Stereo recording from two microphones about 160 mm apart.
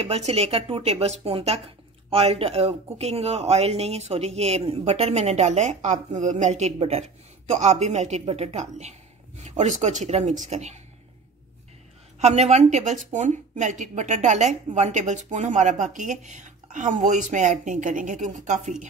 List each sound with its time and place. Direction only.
0.0 s a woman's voice: 40° right (ahead or behind)
12.2 s speech: 45° right (ahead or behind)